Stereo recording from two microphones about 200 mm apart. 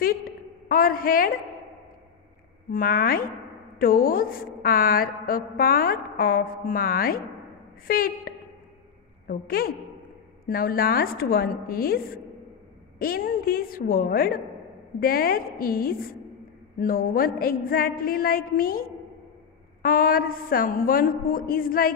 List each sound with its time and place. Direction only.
0.7 s a woman's voice: 45° left (ahead or behind)
2.7 s a woman's voice: 45° left (ahead or behind)